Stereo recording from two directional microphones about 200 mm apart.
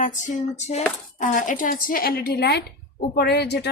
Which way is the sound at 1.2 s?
40° left (ahead or behind).